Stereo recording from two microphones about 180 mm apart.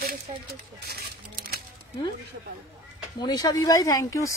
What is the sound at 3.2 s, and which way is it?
Speech, 20° left (ahead or behind).